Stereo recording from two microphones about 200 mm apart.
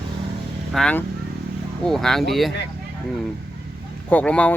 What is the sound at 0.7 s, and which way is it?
Speech, 5° left (ahead or behind).